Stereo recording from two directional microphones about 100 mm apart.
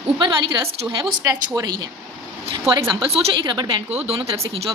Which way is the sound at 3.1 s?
85° right.